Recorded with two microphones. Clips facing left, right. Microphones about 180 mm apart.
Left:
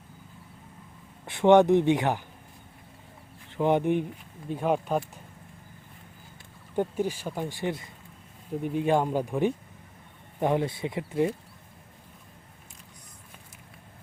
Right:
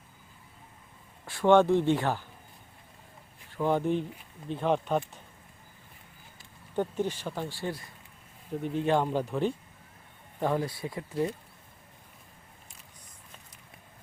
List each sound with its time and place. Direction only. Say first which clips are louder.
1.2 s speech: left 3 dB; 20° left (ahead or behind)
3.5 s speech: left 3 dB; 20° left (ahead or behind)
6.7 s speech: left 2 dB; 10° left (ahead or behind)